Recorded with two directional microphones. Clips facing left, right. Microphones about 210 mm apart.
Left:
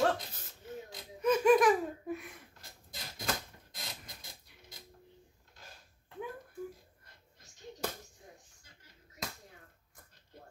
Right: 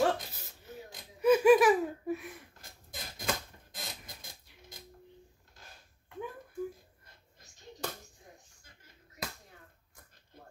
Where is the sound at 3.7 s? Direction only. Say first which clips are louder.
Right 2 dB; 50° right (ahead or behind).